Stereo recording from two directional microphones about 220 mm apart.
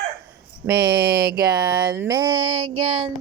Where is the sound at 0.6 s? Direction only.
15° right (ahead or behind).